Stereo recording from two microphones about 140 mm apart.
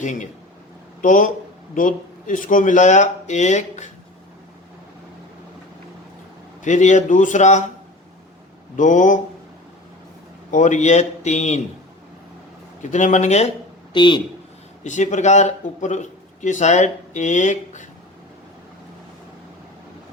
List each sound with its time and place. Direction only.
0.0 s speech: 65° left (ahead or behind)
6.6 s speech: 60° left (ahead or behind)
8.7 s speech: 60° left (ahead or behind)
10.5 s speech: 60° left (ahead or behind)
12.8 s speech: 60° left (ahead or behind)
13.9 s speech: 35° left (ahead or behind)
14.8 s speech: 60° left (ahead or behind)